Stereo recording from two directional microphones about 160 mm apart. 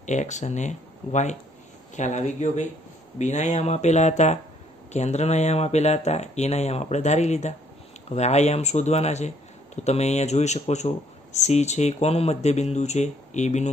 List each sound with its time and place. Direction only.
0.0 s speech: 50° left (ahead or behind)